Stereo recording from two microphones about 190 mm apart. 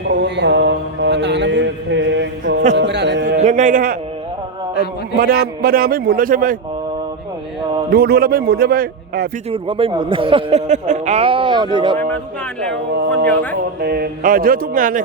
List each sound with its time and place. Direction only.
0.1 s mantra: 65° right (ahead or behind)
2.7 s a sound: 65° right (ahead or behind)
3.4 s a man's voice: 40° right (ahead or behind)
5.1 s a man's voice: 50° right (ahead or behind)
7.9 s a man's voice: 55° right (ahead or behind)
9.5 s speech: 30° right (ahead or behind)
13.8 s a man's voice: 55° right (ahead or behind)